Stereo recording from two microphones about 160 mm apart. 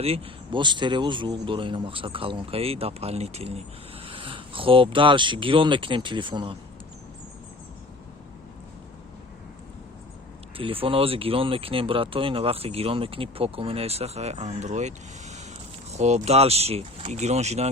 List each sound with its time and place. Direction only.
0.0 s speech: 35° right (ahead or behind)
10.6 s speech: 35° right (ahead or behind)